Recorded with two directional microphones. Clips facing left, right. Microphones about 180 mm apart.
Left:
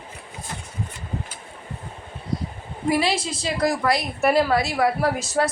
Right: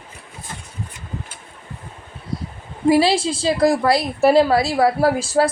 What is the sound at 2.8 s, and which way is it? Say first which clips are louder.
A woman's voice: right 7 dB; 30° right (ahead or behind).